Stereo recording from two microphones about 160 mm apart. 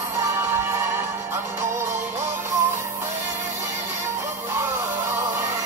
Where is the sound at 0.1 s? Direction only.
20° right (ahead or behind).